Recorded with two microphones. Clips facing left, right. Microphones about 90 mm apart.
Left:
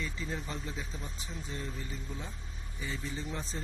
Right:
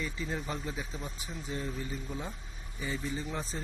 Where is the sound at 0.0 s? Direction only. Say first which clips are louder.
Right 2 dB; 5° right (ahead or behind).